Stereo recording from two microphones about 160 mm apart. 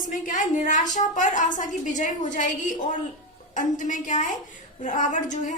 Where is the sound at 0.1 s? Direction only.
55° left (ahead or behind).